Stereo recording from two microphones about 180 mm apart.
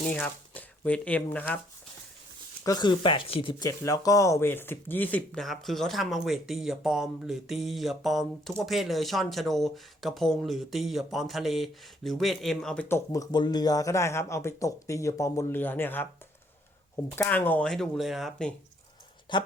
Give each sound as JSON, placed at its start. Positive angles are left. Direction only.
{"t": 0.1, "sound": "speech", "side_deg": 10}
{"t": 2.6, "sound": "speech", "side_deg": 25}
{"t": 17.2, "sound": "speech", "side_deg": 10}
{"t": 19.3, "sound": "speech", "side_deg": 25}